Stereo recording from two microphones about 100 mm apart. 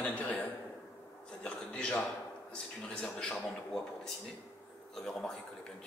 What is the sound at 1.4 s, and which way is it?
A man's voice, 10° left (ahead or behind).